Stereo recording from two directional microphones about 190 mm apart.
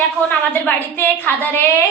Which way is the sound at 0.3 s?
10° left (ahead or behind).